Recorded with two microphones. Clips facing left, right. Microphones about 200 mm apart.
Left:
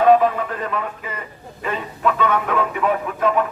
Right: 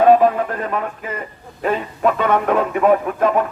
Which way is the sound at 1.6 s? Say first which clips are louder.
Right 4 dB; 50° right (ahead or behind).